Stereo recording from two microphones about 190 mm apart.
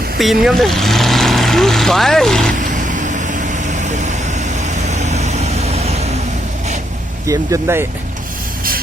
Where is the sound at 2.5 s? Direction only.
40° right (ahead or behind).